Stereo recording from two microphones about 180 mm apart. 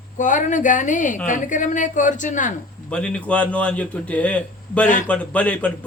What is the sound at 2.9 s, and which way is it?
A man's voice, 5° left (ahead or behind).